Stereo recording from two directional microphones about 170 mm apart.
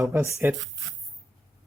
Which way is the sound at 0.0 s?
15° right (ahead or behind).